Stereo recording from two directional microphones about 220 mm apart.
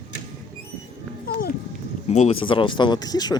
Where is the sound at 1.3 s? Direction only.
45° left (ahead or behind).